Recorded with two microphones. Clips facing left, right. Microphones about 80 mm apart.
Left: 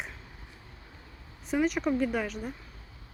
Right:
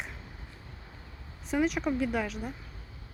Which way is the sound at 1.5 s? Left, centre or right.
Centre.